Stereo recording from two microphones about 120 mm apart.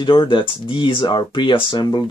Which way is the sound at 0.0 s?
40° left (ahead or behind).